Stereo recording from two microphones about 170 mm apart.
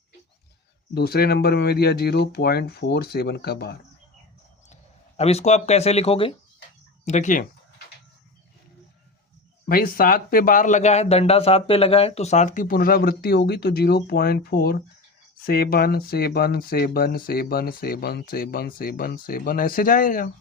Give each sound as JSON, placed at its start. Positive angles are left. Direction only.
{"t": 0.9, "sound": "speech", "side_deg": 65}
{"t": 4.7, "sound": "speech", "side_deg": 40}
{"t": 9.6, "sound": "speech", "side_deg": 60}